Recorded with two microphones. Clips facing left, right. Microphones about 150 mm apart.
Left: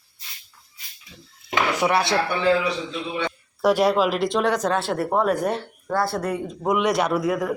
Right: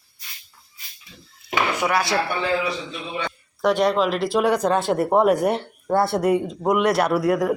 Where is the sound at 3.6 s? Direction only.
5° left (ahead or behind); by 6.7 s 20° right (ahead or behind).